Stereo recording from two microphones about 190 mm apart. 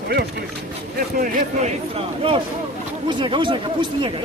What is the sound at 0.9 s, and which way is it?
Speech, 50° right (ahead or behind).